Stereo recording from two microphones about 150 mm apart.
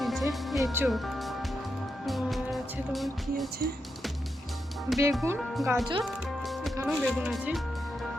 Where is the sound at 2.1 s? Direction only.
Centre (ahead or behind).